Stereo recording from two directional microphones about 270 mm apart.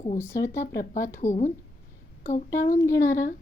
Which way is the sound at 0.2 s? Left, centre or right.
Centre.